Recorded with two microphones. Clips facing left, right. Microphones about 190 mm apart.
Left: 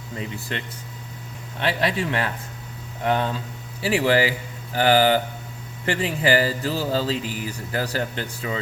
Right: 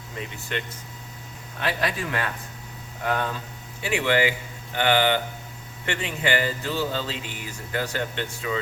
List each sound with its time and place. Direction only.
0.2 s a man's voice: 35° left (ahead or behind)